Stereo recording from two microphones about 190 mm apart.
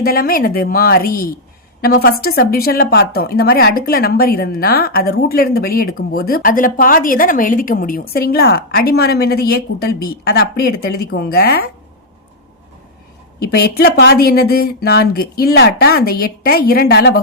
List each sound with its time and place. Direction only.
0.0 s speech: 50° left (ahead or behind)
13.4 s speech: 55° left (ahead or behind)